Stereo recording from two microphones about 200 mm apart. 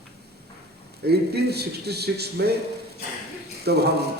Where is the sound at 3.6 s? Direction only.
55° right (ahead or behind).